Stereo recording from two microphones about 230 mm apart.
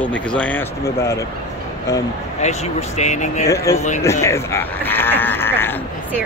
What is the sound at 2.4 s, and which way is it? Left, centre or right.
Speech, left.